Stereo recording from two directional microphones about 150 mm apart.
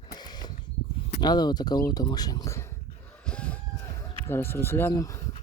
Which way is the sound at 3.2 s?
5° left (ahead or behind).